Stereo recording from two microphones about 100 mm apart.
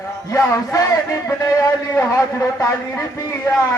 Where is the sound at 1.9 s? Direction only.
30° left (ahead or behind).